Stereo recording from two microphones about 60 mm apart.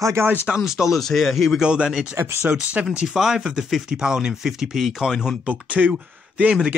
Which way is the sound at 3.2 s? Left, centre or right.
Centre.